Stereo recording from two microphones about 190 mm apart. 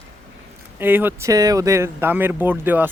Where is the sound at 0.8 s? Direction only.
10° right (ahead or behind).